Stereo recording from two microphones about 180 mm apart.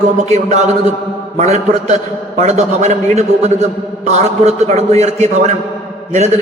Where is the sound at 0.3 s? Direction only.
40° right (ahead or behind).